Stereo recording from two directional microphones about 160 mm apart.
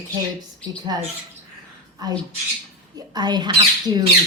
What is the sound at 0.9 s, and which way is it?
A woman's voice, 25° right (ahead or behind).